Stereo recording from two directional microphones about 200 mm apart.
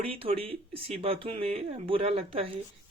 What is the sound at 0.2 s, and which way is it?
Speech, 30° right (ahead or behind).